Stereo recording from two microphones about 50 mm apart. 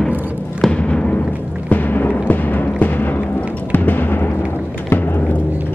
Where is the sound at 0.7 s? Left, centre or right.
Left.